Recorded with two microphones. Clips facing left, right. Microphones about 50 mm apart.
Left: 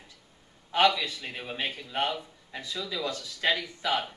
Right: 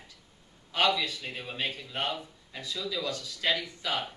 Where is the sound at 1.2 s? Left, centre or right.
Centre.